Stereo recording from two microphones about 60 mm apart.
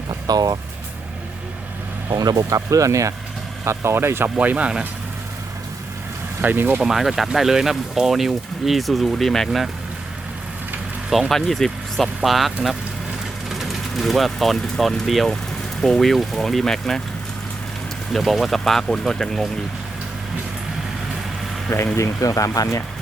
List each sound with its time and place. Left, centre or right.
0.3 s speech: right
2.1 s speech: right
3.6 s speech: right
4.4 s speech: right
6.4 s speech: right
6.7 s speech: centre
11.1 s speech: centre
18.1 s speech: centre
21.9 s speech: left